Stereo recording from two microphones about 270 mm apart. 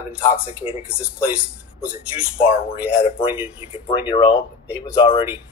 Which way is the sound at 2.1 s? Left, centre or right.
Centre.